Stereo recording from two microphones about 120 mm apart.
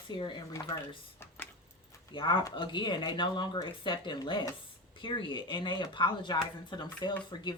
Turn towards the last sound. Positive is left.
turn(degrees=35)  # may be behind; listen again after turning